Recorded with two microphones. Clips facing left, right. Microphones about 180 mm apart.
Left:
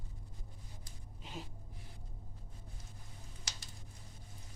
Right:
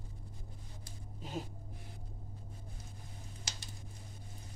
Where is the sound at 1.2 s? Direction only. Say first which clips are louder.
Right 6 dB; 45° right (ahead or behind).